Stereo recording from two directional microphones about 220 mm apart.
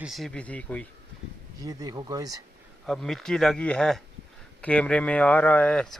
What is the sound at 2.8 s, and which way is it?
Speech, centre (ahead or behind).